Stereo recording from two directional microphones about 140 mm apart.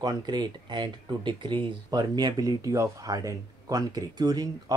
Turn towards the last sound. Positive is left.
turn(degrees=-30)  # may be behind; listen again after turning